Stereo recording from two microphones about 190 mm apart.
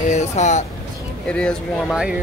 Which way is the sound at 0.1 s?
40° left (ahead or behind).